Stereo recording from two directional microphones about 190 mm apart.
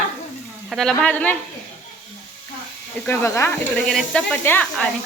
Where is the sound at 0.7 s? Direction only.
Centre (ahead or behind).